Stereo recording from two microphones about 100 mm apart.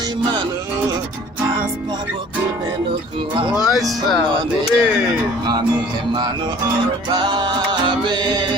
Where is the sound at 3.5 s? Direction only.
5° right (ahead or behind).